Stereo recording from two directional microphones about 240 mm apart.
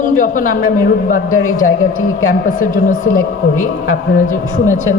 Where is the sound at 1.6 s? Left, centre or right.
Left.